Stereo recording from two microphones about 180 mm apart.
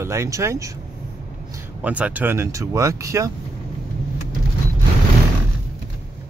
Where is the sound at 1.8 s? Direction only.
10° right (ahead or behind).